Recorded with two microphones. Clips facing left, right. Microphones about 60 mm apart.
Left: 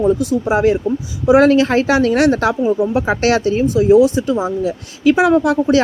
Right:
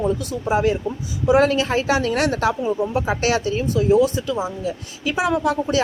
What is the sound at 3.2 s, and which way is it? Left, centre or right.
Speech, left.